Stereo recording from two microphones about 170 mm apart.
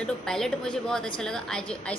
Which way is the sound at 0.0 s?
5° left (ahead or behind).